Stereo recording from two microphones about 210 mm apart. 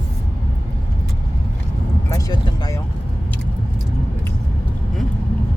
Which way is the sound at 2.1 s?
15° left (ahead or behind).